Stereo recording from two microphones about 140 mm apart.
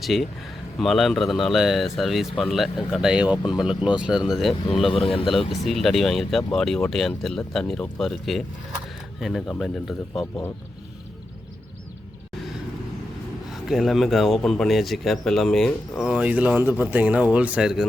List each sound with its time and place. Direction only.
0.0 s speech: centre (ahead or behind)
4.9 s speech: 40° left (ahead or behind)
5.3 s speech: centre (ahead or behind)
13.5 s speech: centre (ahead or behind)